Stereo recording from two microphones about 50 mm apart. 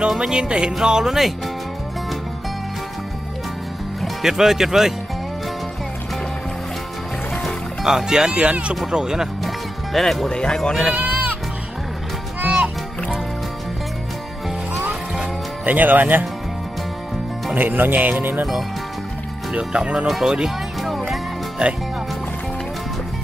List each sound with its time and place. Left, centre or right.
0.1 s speech: centre
4.2 s speech: centre
7.8 s speech: centre
9.9 s speech: centre
10.3 s speech: centre
12.4 s music: centre
15.6 s speech: right
17.6 s speech: right
19.5 s speech: right
20.1 s speech: centre
20.3 s music: centre
21.6 s speech: centre